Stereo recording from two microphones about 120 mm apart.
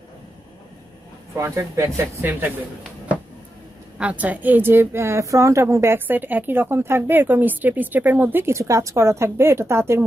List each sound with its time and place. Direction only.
1.3 s a woman's voice: 25° right (ahead or behind)
4.0 s a woman's voice: 10° right (ahead or behind)